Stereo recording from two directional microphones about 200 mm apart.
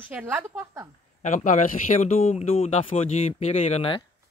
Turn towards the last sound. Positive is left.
turn(degrees=30)  # may be behind; listen again after turning